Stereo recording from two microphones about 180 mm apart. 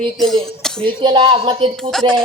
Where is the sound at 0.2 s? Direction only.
Centre (ahead or behind).